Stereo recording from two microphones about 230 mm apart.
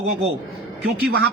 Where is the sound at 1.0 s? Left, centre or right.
Right.